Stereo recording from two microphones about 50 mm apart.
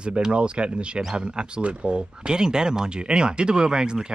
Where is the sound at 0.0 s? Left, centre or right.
Centre.